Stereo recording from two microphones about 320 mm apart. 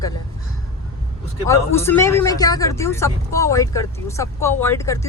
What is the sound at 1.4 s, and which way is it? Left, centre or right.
Speech, centre.